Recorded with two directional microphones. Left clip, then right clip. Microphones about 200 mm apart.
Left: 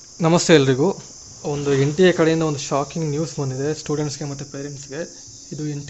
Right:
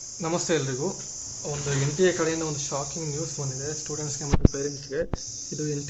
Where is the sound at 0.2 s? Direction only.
50° left (ahead or behind).